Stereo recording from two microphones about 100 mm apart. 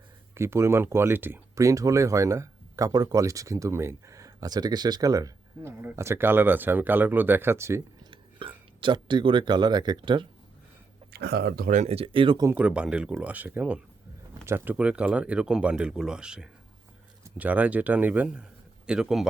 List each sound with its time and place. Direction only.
0.3 s speech: 25° right (ahead or behind)
1.5 s speech: 30° right (ahead or behind)
8.1 s speech: 60° right (ahead or behind)
11.9 s speech: 70° right (ahead or behind)
12.5 s speech: 10° right (ahead or behind)